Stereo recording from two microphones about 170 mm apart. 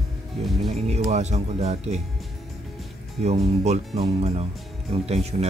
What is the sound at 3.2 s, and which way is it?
Speech, 40° right (ahead or behind).